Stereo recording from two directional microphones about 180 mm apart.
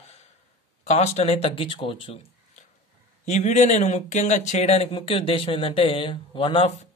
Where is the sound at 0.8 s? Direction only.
40° left (ahead or behind).